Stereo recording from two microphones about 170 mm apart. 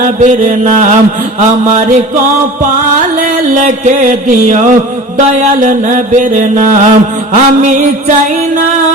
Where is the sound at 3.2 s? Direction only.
50° right (ahead or behind).